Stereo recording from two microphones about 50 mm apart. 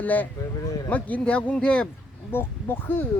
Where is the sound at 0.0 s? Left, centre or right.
Left.